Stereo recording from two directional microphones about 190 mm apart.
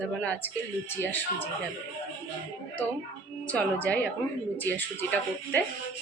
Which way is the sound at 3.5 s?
5° left (ahead or behind).